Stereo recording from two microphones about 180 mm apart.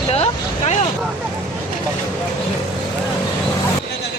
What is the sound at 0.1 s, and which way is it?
Vehicle, 35° left (ahead or behind).